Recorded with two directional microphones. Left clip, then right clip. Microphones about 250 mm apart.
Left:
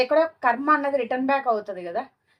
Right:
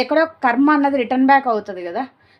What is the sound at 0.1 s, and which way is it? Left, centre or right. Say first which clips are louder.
A woman's voice: right 4 dB; right.